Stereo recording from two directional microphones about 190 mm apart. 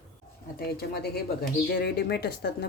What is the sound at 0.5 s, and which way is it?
Speech, 55° left (ahead or behind).